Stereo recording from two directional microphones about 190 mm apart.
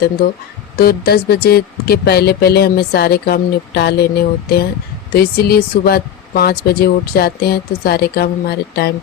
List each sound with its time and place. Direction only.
0.8 s speech: 55° left (ahead or behind)